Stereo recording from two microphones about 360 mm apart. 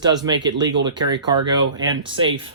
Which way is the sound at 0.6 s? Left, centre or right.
Centre.